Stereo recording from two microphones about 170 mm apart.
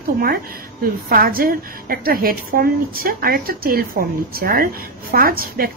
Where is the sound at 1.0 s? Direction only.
60° right (ahead or behind).